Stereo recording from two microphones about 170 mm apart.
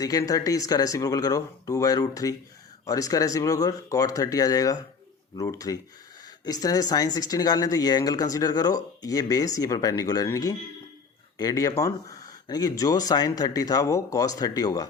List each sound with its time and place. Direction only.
0.0 s speech: 20° left (ahead or behind)